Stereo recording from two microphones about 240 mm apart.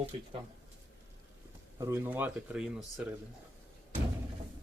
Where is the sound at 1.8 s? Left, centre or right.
Centre.